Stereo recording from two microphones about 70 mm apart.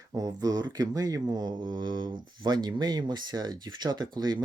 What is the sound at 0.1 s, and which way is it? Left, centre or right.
Speech, right.